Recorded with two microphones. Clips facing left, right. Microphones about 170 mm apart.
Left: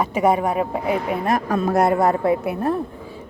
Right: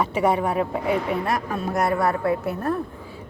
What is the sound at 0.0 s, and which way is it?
Speech, 10° left (ahead or behind).